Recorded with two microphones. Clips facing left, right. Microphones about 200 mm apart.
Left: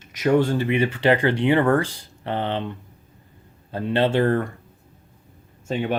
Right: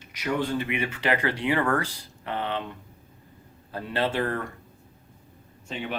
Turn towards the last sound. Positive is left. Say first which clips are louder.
# left 9 dB
turn(degrees=45)  # may be behind; listen again after turning